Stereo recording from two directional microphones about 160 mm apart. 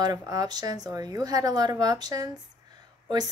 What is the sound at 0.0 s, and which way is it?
Speech, 25° right (ahead or behind).